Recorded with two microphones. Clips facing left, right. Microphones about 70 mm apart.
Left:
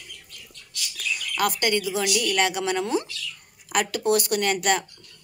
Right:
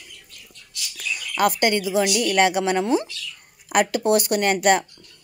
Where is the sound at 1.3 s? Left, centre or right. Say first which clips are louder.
Right 4 dB; right.